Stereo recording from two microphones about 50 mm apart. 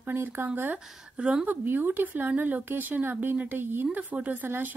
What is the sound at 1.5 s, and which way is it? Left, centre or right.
Speech, right.